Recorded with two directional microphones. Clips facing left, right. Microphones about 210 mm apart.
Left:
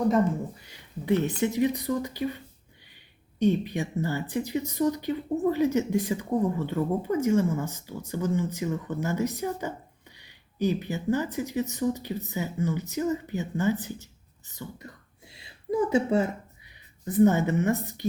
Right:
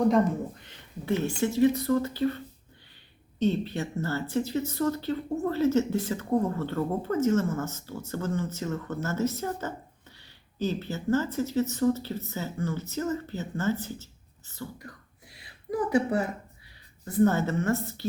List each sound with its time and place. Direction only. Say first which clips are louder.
0.1 s speech: even; 10° left (ahead or behind)
15.3 s a sound: left 3 dB; 25° left (ahead or behind)
17.1 s speech: left 3 dB; 15° left (ahead or behind)